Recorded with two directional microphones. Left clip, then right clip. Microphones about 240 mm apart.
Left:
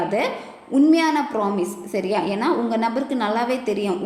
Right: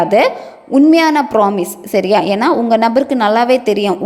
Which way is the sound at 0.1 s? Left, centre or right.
Right.